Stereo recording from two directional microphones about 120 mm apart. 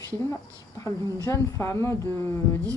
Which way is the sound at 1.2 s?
25° left (ahead or behind).